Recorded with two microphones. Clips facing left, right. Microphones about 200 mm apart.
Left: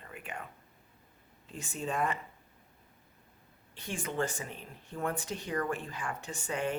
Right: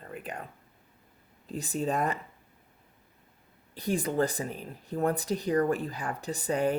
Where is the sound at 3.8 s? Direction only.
35° right (ahead or behind).